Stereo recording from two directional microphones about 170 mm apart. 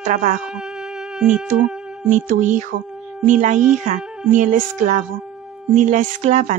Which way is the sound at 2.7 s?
60° right (ahead or behind).